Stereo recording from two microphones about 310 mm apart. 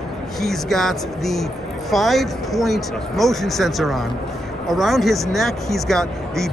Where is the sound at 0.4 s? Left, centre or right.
Centre.